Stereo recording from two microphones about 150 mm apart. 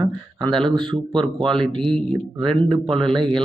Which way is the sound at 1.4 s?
5° left (ahead or behind).